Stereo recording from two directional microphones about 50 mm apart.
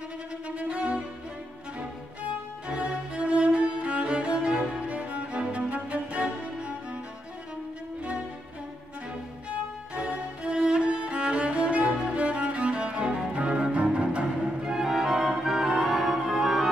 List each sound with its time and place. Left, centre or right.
0.6 s music: right
2.7 s music: right
9.9 s music: right